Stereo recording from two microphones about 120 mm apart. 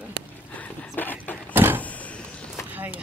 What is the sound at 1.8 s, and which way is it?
Vehicle, 10° left (ahead or behind).